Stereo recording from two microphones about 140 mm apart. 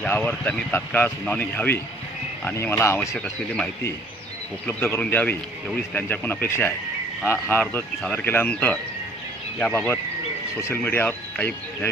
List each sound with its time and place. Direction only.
0.0 s speech: 10° left (ahead or behind)
4.9 s speech: 10° left (ahead or behind)